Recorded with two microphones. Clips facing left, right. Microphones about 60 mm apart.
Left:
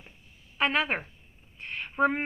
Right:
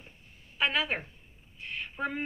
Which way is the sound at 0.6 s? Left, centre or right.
Left.